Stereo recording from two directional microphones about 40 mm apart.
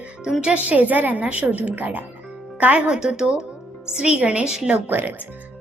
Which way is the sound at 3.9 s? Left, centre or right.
Right.